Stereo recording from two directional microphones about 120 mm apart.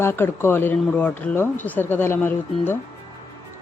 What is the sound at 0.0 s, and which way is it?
Speech, 20° left (ahead or behind).